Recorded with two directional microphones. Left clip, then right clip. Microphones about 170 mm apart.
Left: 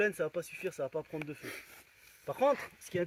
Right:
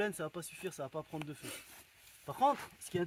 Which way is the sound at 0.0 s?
55° right (ahead or behind).